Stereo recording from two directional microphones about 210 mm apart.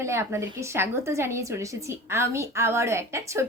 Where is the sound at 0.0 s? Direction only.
15° right (ahead or behind).